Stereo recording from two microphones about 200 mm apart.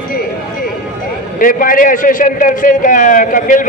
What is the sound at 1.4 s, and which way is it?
A man's voice, 45° left (ahead or behind).